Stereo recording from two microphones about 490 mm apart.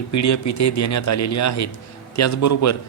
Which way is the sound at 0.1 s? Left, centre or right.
Left.